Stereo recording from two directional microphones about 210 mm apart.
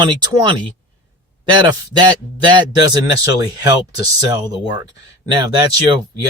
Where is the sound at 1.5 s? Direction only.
20° right (ahead or behind).